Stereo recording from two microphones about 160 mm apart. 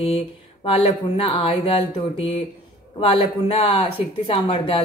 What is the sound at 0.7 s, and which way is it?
Speech, 35° left (ahead or behind).